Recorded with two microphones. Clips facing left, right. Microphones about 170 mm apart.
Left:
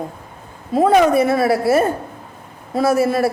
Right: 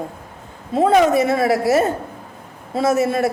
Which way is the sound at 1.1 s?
25° right (ahead or behind).